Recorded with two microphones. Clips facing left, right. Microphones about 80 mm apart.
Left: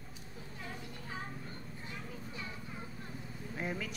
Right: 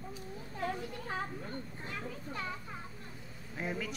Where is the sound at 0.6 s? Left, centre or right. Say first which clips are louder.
Right 10 dB; right.